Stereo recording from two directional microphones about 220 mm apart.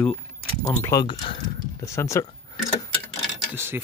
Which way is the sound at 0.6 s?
15° left (ahead or behind).